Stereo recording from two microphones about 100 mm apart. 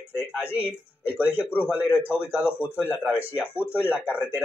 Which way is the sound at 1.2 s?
15° right (ahead or behind).